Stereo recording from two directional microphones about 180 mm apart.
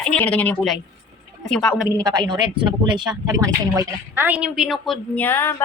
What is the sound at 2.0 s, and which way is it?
Speech, 20° right (ahead or behind).